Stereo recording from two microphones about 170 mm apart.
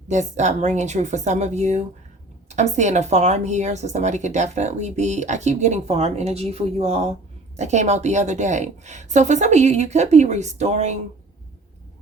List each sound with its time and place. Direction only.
0.1 s speech: 45° right (ahead or behind)